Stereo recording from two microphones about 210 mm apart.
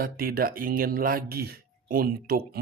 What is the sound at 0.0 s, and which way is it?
Speech, 45° right (ahead or behind).